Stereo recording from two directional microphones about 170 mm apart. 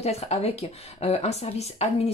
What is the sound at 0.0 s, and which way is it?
Speech, 40° left (ahead or behind).